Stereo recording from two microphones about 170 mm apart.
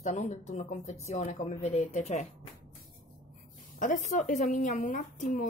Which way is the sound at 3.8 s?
45° left (ahead or behind).